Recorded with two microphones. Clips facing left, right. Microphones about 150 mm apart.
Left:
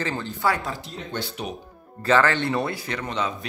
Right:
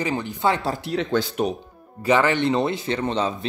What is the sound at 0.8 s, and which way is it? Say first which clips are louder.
Speech: right 11 dB; 80° right.